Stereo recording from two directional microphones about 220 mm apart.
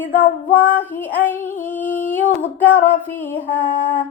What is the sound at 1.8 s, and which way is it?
Humming, 10° left (ahead or behind).